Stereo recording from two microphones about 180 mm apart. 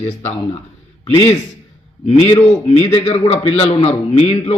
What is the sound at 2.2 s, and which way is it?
A man's voice, 30° left (ahead or behind).